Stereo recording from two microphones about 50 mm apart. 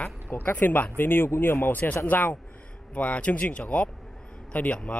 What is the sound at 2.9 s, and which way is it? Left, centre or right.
Speech, left.